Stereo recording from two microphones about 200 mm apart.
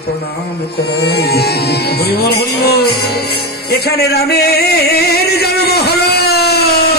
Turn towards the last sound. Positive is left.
turn(degrees=55)  # may be behind; listen again after turning